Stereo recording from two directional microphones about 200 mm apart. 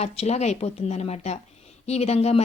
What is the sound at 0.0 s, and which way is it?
A woman's voice, 35° left (ahead or behind).